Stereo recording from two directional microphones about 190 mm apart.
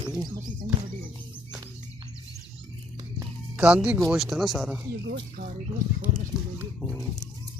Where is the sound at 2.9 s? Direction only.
10° right (ahead or behind).